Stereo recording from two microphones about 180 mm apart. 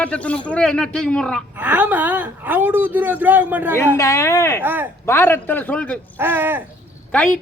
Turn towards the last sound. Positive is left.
turn(degrees=10)  # may be behind; listen again after turning